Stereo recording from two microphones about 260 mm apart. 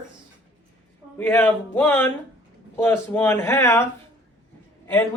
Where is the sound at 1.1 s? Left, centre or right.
Centre.